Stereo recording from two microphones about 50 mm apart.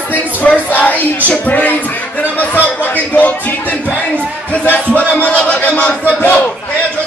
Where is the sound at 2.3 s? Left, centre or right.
Left.